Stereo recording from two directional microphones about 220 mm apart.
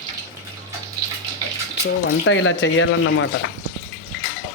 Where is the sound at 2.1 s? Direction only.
60° left (ahead or behind).